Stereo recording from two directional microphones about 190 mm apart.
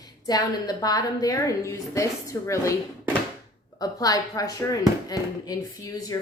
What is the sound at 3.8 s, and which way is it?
Speech, 20° left (ahead or behind).